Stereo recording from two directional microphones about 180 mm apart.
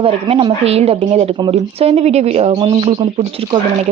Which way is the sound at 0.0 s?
30° right (ahead or behind).